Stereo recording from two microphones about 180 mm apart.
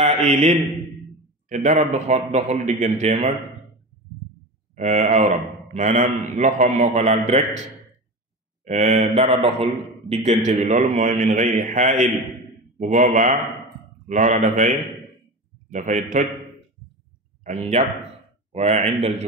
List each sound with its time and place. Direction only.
0.0 s mantra: 40° right (ahead or behind)
1.5 s a man's voice: 45° right (ahead or behind)
4.7 s a man's voice: 40° right (ahead or behind)
8.6 s a man's voice: 40° right (ahead or behind)
10.4 s a man's voice: 40° right (ahead or behind)
17.4 s a man's voice: 40° right (ahead or behind)